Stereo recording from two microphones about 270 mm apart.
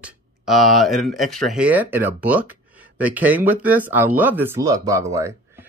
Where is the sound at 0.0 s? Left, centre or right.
Centre.